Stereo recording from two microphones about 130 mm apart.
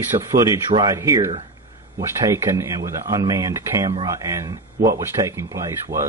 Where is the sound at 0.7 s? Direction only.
35° right (ahead or behind).